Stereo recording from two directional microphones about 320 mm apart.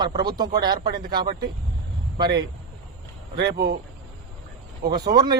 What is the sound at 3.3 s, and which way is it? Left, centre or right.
Speech, right.